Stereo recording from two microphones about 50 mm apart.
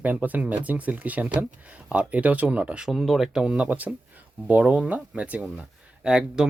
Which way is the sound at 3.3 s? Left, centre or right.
Centre.